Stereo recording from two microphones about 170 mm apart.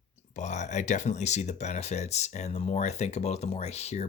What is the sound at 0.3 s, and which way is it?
Speech, 45° left (ahead or behind).